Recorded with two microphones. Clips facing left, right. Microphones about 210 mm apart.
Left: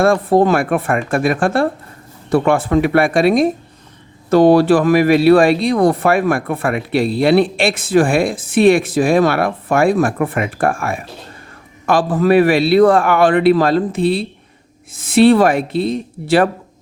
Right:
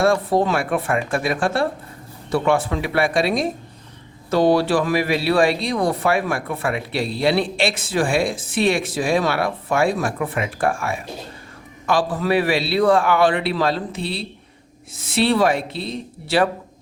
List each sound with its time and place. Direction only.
0.0 s speech: 50° left (ahead or behind)